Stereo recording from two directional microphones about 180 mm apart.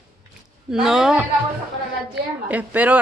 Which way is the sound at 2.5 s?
10° right (ahead or behind).